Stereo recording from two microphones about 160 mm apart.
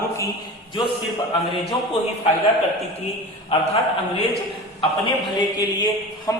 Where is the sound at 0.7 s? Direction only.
30° left (ahead or behind).